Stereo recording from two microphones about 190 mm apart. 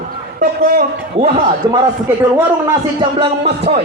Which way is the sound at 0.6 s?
45° right (ahead or behind).